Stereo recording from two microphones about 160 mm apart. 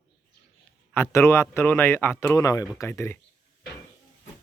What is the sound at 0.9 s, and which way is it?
Speech, 15° left (ahead or behind).